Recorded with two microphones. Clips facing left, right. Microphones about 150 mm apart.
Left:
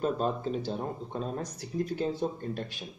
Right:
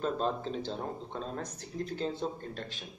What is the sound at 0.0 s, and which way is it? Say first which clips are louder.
Speech: left 2 dB; 10° left (ahead or behind).